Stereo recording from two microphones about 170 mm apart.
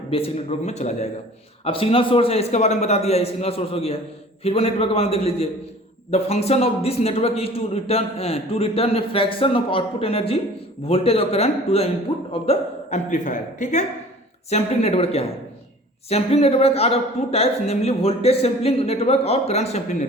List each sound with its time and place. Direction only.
0.1 s a man's voice: 40° left (ahead or behind)